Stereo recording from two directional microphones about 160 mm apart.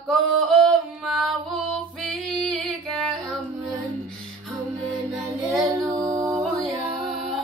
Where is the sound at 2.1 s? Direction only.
Centre (ahead or behind).